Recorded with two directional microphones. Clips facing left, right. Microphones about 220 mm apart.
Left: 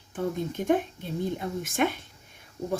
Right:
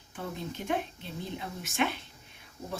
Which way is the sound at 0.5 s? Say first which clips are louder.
Left 7 dB; 50° left (ahead or behind).